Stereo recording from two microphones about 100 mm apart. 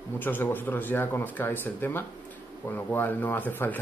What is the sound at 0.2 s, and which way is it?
Speech, 20° left (ahead or behind).